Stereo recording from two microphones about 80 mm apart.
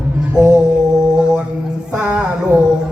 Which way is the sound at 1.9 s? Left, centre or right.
Centre.